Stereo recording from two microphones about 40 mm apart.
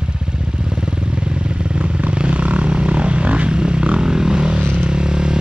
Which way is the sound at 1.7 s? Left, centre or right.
Right.